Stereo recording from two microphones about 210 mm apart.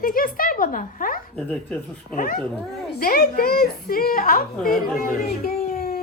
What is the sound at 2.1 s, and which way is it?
Speech, 40° left (ahead or behind).